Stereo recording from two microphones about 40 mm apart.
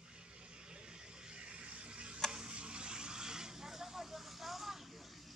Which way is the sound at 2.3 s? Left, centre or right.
Right.